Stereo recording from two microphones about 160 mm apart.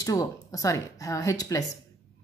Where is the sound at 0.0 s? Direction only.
20° left (ahead or behind).